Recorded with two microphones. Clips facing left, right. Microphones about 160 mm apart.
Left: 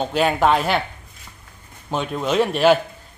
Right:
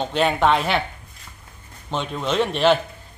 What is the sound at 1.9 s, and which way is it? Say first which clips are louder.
Speech: left 2 dB; 5° left (ahead or behind).